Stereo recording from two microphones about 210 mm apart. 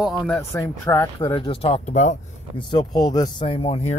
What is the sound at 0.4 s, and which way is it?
Speech, 15° left (ahead or behind).